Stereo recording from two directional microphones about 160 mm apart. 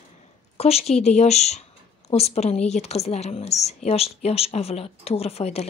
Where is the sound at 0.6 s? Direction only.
40° left (ahead or behind).